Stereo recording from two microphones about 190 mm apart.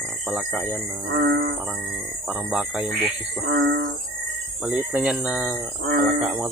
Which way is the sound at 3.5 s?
50° right (ahead or behind).